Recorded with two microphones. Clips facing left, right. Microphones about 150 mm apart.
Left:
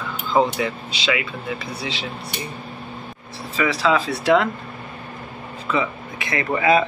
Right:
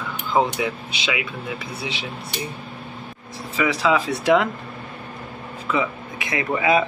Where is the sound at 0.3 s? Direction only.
10° right (ahead or behind).